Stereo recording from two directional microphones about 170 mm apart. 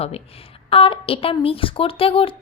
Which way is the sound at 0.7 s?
35° left (ahead or behind).